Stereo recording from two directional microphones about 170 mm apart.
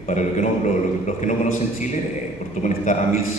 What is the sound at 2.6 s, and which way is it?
Speech, 45° left (ahead or behind).